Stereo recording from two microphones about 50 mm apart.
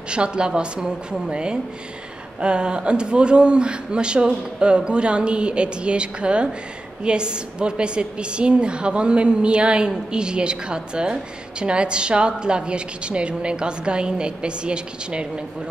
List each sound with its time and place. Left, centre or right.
0.1 s a woman's voice: centre